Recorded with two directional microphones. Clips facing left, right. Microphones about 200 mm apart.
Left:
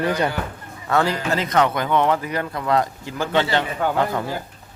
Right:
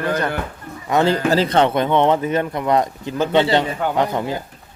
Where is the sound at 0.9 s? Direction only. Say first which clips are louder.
Right 4 dB; 20° right (ahead or behind).